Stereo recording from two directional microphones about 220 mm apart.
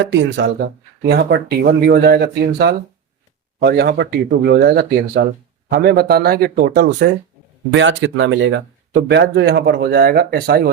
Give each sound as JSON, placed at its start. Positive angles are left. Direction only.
{"t": 0.0, "sound": "speech", "side_deg": -55}